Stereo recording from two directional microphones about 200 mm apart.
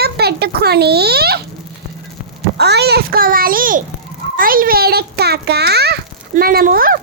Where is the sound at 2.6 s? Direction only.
55° right (ahead or behind).